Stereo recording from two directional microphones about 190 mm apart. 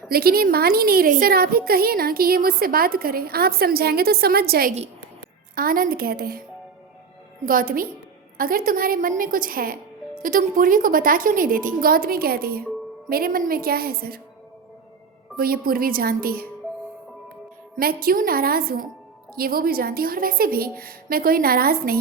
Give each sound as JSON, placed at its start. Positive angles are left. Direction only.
{"t": 0.1, "sound": "a woman's voice", "side_deg": -55}
{"t": 7.4, "sound": "a woman's voice", "side_deg": -45}
{"t": 15.4, "sound": "a woman's voice", "side_deg": -50}
{"t": 17.7, "sound": "a woman's voice", "side_deg": -50}